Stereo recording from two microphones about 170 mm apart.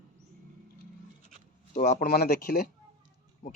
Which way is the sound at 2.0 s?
70° left (ahead or behind).